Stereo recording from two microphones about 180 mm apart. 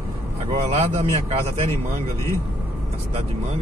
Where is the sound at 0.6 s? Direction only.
35° right (ahead or behind).